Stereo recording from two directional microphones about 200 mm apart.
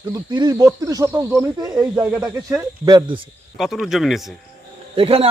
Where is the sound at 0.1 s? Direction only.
20° right (ahead or behind).